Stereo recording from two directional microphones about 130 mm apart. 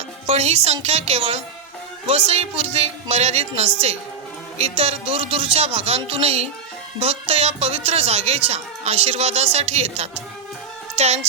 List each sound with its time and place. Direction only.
0.3 s speech: 55° right (ahead or behind)
10.9 s music: 55° right (ahead or behind)